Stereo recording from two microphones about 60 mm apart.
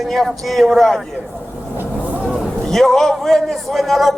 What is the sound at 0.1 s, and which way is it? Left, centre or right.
Speech, centre.